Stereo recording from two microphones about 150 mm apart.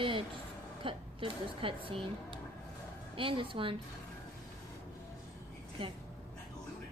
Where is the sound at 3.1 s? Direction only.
35° right (ahead or behind).